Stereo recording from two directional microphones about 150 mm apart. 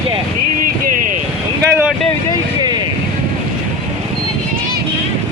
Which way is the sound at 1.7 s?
10° right (ahead or behind).